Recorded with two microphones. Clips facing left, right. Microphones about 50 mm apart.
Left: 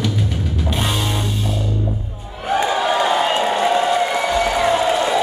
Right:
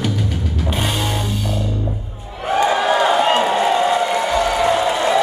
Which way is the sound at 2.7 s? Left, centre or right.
Right.